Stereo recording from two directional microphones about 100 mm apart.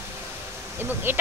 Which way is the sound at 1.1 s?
20° right (ahead or behind).